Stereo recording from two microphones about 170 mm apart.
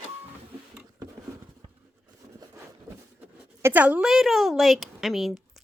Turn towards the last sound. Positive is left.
turn(degrees=0)  # may be behind; listen again after turning